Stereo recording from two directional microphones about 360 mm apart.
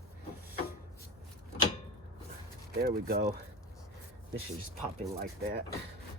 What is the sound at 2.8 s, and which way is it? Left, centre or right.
Speech, right.